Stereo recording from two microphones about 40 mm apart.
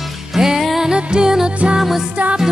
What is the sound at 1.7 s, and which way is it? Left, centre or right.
Music, centre.